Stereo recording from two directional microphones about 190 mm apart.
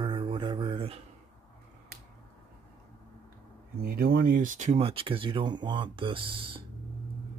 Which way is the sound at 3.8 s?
55° right (ahead or behind).